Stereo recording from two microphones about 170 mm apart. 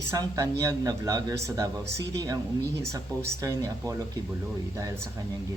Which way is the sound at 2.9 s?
20° right (ahead or behind).